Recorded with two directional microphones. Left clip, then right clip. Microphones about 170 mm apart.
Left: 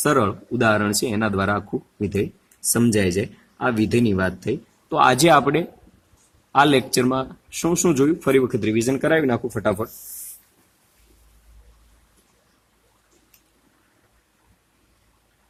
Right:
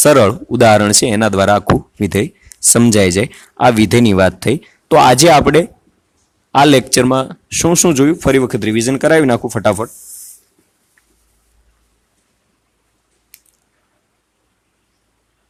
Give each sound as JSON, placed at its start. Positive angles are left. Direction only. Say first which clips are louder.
{"t": 0.0, "sound": "speech", "louder": "right 11 dB", "side_deg": -60}
{"t": 4.9, "sound": "speech", "louder": "right 8 dB", "side_deg": -55}